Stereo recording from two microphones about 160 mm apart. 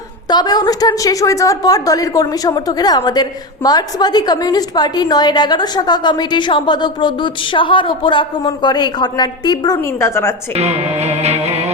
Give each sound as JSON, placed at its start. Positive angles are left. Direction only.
{"t": 0.3, "sound": "a woman's voice", "side_deg": 25}
{"t": 9.7, "sound": "a woman's voice", "side_deg": 15}
{"t": 10.5, "sound": "music", "side_deg": -40}